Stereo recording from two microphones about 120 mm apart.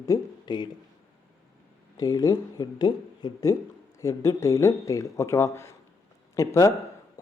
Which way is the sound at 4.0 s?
25° left (ahead or behind).